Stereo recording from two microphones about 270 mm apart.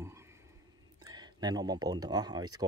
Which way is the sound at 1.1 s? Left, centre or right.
Centre.